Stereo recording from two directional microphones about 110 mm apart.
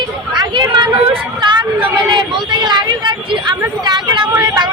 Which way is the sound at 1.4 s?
45° right (ahead or behind).